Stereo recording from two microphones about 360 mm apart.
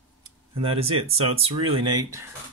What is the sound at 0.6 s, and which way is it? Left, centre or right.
Speech, centre.